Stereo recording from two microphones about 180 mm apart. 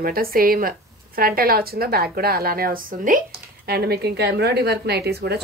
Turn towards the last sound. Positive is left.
turn(degrees=-65)  # may be behind; listen again after turning